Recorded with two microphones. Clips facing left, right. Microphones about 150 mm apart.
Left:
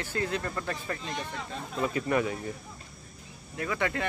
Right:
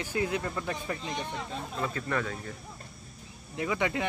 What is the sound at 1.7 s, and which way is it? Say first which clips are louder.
Speech: left 5 dB; 15° left (ahead or behind).